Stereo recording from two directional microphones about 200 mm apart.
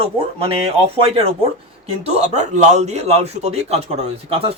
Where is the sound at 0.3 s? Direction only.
25° right (ahead or behind).